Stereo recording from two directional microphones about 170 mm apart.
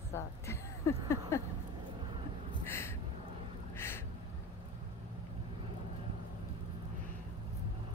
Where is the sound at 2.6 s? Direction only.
15° left (ahead or behind).